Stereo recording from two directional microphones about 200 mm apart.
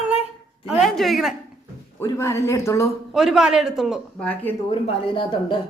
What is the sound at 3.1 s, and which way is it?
A woman's voice, centre (ahead or behind).